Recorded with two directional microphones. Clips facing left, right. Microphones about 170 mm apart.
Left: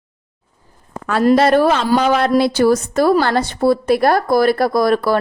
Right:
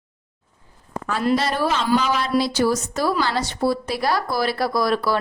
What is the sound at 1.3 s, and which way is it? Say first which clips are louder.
A woman's voice: left 9 dB; 60° left (ahead or behind).